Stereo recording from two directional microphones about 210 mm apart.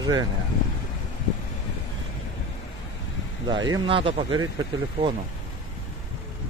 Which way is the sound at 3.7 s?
25° right (ahead or behind).